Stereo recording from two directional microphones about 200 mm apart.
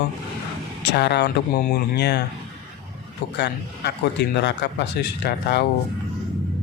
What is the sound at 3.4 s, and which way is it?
A man's voice, 55° left (ahead or behind).